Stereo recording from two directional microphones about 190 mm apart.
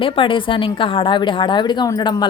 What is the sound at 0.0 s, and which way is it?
A woman's voice, 25° left (ahead or behind).